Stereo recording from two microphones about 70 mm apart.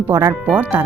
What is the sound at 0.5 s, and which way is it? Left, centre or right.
Speech, right.